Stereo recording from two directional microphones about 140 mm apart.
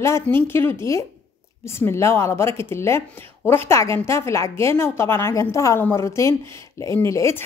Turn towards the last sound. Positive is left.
turn(degrees=20)  # may be behind; listen again after turning